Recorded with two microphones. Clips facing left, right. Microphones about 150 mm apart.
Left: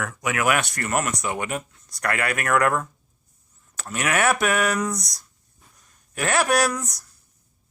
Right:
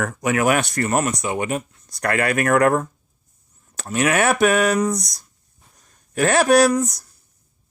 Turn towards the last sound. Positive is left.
turn(degrees=-35)  # may be behind; listen again after turning